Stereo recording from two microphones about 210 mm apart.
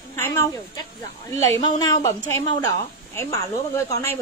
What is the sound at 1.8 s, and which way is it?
Speech, 15° left (ahead or behind).